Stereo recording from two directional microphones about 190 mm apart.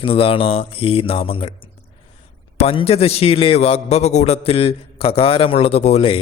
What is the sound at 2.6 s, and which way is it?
A man's voice, 30° left (ahead or behind).